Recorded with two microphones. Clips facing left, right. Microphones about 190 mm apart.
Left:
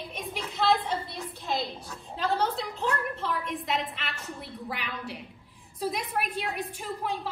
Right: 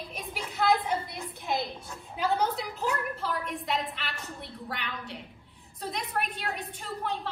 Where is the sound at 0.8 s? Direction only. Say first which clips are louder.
Right 1 dB; 15° right (ahead or behind).